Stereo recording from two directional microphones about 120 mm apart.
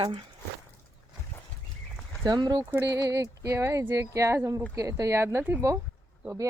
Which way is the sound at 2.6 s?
20° right (ahead or behind).